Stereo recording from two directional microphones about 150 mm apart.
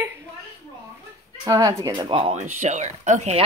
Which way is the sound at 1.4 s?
20° right (ahead or behind).